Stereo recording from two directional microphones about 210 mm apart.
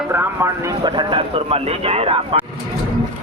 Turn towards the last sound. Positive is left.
turn(degrees=-25)  # may be behind; listen again after turning